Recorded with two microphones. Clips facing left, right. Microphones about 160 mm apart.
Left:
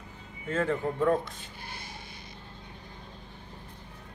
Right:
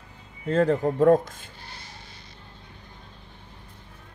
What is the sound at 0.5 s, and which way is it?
Speech, 35° right (ahead or behind).